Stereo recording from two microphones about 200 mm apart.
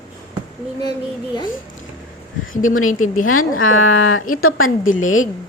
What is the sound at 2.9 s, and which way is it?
Speech, 40° left (ahead or behind).